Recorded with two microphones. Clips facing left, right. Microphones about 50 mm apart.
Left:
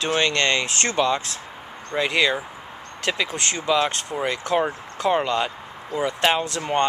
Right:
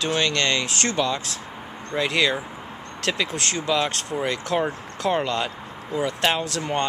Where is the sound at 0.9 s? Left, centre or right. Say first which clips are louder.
Left 3 dB; centre.